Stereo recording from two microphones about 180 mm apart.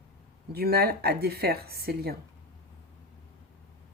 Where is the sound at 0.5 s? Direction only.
60° right (ahead or behind).